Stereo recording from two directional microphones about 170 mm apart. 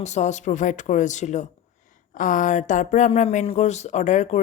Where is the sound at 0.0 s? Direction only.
45° left (ahead or behind).